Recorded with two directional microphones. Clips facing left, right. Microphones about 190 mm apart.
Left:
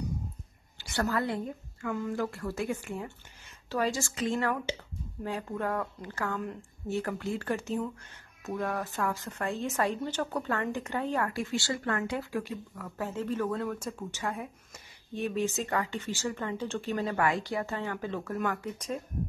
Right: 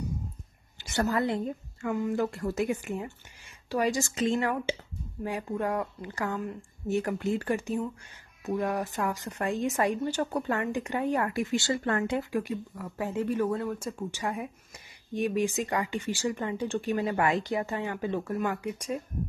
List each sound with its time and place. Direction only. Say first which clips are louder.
0.7 s a woman's voice: right 3 dB; 20° right (ahead or behind)